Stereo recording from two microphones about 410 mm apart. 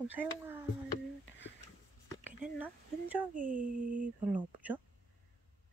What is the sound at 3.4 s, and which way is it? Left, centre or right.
Speech, centre.